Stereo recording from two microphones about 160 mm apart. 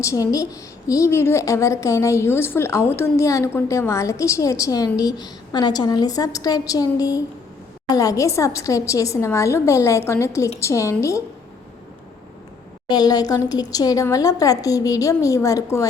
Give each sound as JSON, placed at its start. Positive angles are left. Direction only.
{"t": 0.0, "sound": "a woman's voice", "side_deg": 20}
{"t": 12.9, "sound": "a woman's voice", "side_deg": 25}